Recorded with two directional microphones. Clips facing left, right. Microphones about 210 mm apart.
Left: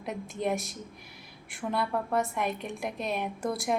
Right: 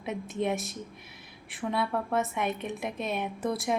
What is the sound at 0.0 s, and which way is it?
A woman's voice, centre (ahead or behind).